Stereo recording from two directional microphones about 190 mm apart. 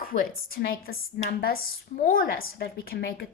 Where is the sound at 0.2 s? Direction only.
50° left (ahead or behind).